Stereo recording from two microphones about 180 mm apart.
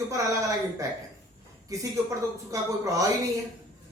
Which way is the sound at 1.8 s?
20° right (ahead or behind).